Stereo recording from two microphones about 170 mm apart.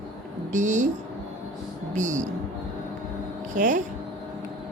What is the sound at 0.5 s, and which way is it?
Speech, 45° right (ahead or behind).